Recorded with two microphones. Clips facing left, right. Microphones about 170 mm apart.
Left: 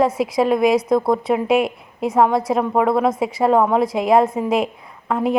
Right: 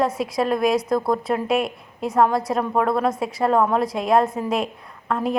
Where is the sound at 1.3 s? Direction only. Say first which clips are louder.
Left 4 dB; 20° left (ahead or behind).